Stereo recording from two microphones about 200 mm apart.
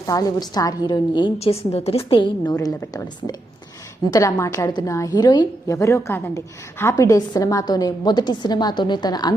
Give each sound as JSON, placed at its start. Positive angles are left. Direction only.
{"t": 0.0, "sound": "a woman's voice", "side_deg": 20}